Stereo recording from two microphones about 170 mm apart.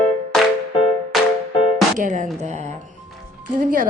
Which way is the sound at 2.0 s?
45° right (ahead or behind).